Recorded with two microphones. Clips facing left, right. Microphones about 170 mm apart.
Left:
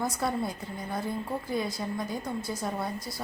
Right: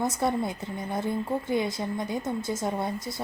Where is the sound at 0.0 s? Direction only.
20° right (ahead or behind).